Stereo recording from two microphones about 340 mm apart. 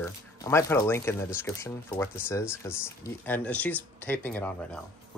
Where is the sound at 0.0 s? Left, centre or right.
Centre.